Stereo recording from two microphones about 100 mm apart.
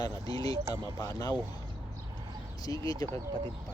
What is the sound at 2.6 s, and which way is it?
Speech, 40° left (ahead or behind).